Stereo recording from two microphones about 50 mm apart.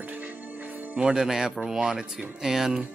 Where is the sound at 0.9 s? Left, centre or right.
Centre.